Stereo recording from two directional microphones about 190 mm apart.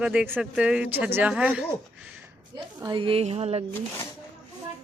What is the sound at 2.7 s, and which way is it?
Speech, 20° right (ahead or behind).